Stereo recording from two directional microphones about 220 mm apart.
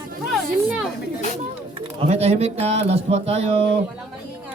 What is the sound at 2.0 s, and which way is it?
Speech, 30° right (ahead or behind).